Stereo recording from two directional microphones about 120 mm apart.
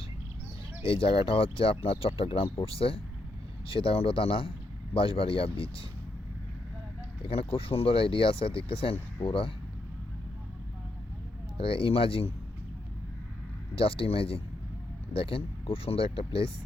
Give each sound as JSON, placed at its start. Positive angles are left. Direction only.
{"t": 0.8, "sound": "speech", "side_deg": 50}
{"t": 7.3, "sound": "speech", "side_deg": 50}
{"t": 11.5, "sound": "speech", "side_deg": 50}
{"t": 13.7, "sound": "speech", "side_deg": 50}